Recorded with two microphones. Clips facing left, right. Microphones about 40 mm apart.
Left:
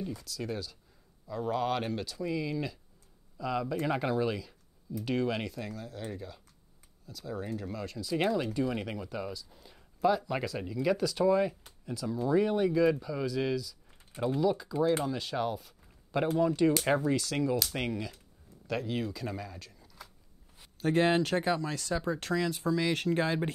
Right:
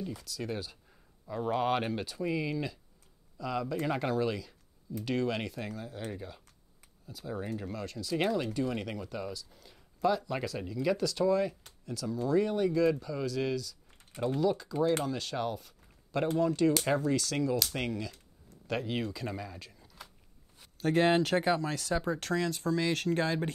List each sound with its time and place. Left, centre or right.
0.1 s speech: centre
1.2 s speech: centre
2.5 s speech: centre
7.6 s speech: centre
18.7 s speech: centre